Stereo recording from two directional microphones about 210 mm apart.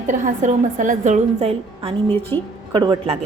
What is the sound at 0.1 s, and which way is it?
A woman's voice, 35° right (ahead or behind).